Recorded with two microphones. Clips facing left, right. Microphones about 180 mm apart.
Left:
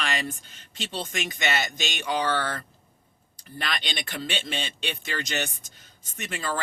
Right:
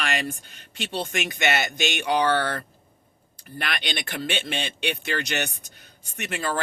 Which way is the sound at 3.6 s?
60° right (ahead or behind).